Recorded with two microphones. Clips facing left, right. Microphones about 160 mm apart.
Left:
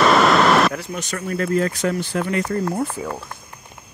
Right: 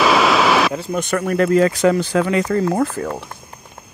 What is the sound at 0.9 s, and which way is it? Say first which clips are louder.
Speech: right 7 dB; 60° right (ahead or behind).